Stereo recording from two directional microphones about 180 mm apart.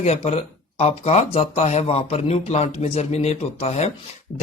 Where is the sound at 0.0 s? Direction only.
35° left (ahead or behind).